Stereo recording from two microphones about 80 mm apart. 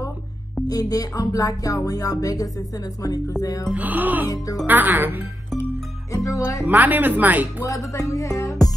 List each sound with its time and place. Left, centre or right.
0.7 s music: left
3.7 s speech: right
6.1 s music: left
6.6 s speech: right
7.6 s music: left